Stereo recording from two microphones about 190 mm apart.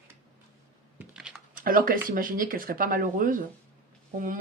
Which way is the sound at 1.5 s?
50° right (ahead or behind).